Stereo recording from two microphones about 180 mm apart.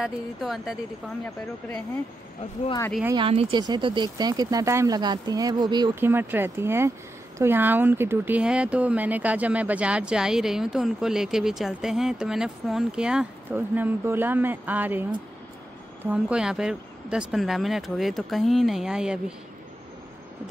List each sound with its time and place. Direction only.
0.0 s speech: centre (ahead or behind)
3.2 s speech: 30° right (ahead or behind)
5.9 s speech: 10° right (ahead or behind)